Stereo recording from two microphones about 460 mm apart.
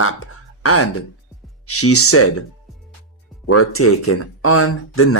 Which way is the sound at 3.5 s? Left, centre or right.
Left.